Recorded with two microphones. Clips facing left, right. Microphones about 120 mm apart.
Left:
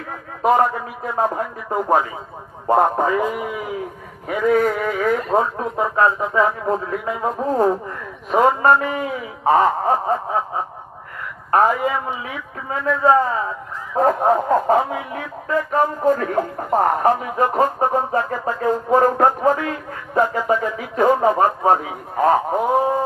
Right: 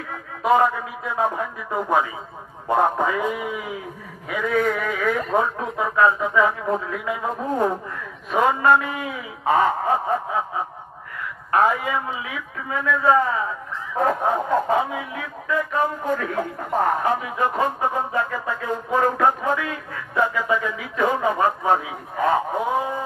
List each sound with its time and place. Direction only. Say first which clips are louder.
1.1 s speech: left 2 dB; 40° left (ahead or behind)
11.5 s speech: left 3 dB; 35° left (ahead or behind)